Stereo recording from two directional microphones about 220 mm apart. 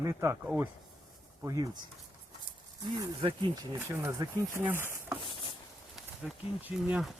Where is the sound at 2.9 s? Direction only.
20° right (ahead or behind).